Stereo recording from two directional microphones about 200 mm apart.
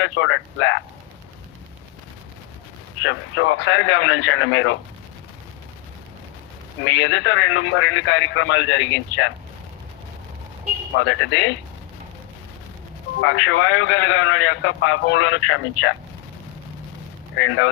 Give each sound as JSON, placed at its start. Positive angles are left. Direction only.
{"t": 0.0, "sound": "a man's voice", "side_deg": 70}
{"t": 3.0, "sound": "a man's voice", "side_deg": 70}
{"t": 6.8, "sound": "a man's voice", "side_deg": 65}
{"t": 10.9, "sound": "a man's voice", "side_deg": 70}
{"t": 13.2, "sound": "a man's voice", "side_deg": 70}
{"t": 17.3, "sound": "a man's voice", "side_deg": 70}